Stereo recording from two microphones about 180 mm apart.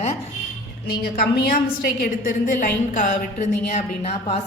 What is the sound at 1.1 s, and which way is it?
A woman's voice, 55° left (ahead or behind).